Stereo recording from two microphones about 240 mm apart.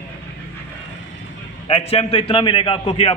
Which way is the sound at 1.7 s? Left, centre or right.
Left.